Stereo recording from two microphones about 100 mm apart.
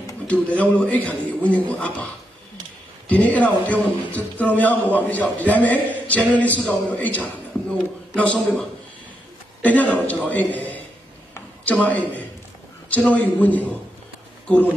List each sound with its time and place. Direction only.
0.3 s speech: 15° left (ahead or behind)
3.1 s a man's voice: 15° left (ahead or behind)